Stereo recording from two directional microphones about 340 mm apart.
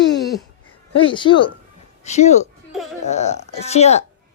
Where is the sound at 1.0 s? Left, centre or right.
Centre.